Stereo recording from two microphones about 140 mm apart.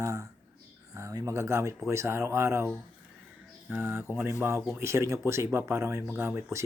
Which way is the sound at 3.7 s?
15° right (ahead or behind).